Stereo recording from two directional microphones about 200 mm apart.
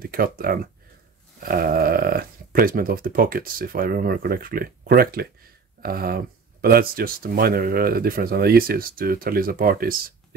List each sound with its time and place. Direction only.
0.0 s speech: 45° right (ahead or behind)